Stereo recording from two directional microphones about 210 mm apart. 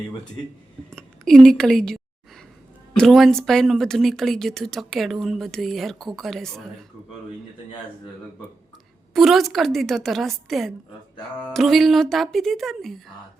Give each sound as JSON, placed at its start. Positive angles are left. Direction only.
{"t": 0.9, "sound": "a woman's voice", "side_deg": 5}
{"t": 9.1, "sound": "speech", "side_deg": 0}